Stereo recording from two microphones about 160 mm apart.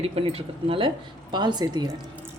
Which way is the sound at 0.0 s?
35° right (ahead or behind).